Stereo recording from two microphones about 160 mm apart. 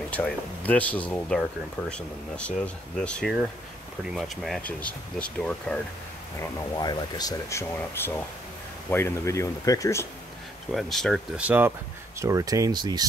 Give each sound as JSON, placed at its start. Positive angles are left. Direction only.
{"t": 0.1, "sound": "speech", "side_deg": 10}
{"t": 6.4, "sound": "speech", "side_deg": 20}
{"t": 10.7, "sound": "speech", "side_deg": 0}
{"t": 11.4, "sound": "speech", "side_deg": -10}